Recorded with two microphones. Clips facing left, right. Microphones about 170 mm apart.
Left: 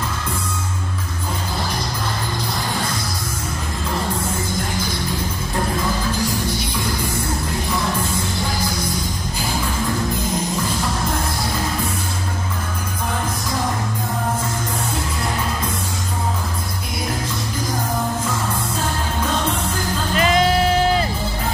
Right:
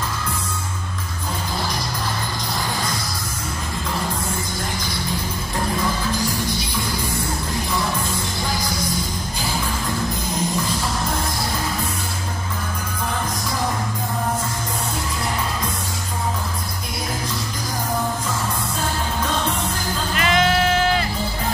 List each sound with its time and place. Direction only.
20.2 s bleat: 35° left (ahead or behind)